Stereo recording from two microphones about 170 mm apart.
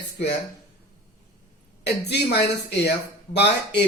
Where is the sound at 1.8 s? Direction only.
80° left.